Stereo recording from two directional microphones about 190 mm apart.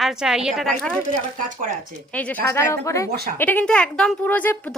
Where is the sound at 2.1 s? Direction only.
5° left (ahead or behind).